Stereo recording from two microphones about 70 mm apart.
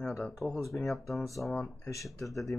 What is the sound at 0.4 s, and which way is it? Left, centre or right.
Speech, left.